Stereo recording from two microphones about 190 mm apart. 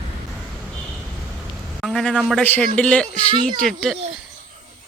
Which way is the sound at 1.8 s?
Centre (ahead or behind).